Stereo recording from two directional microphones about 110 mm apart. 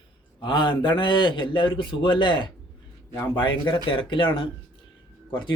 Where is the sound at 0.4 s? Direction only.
45° left (ahead or behind).